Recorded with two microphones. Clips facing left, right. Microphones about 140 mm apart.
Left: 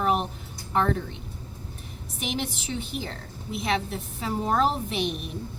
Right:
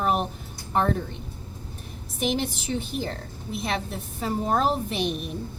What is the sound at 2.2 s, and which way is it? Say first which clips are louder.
A woman's voice: right 5 dB; 40° right (ahead or behind).